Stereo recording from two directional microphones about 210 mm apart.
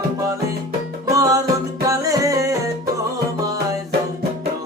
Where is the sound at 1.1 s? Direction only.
15° right (ahead or behind).